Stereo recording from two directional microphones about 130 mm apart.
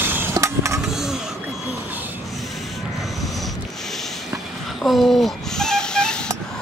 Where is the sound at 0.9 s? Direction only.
5° right (ahead or behind).